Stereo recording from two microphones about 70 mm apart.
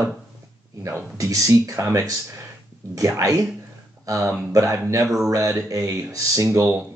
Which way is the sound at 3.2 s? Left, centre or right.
Right.